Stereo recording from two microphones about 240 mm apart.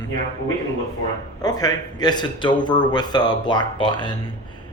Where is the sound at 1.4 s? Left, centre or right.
Centre.